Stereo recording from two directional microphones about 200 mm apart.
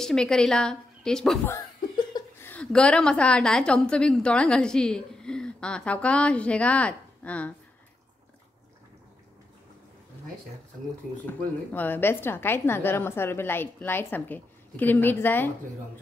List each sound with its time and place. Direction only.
0.0 s a woman's voice: 5° left (ahead or behind)
1.5 s chuckle: 15° left (ahead or behind)
2.5 s a woman's voice: 5° left (ahead or behind)
11.2 s a woman's voice: 10° left (ahead or behind)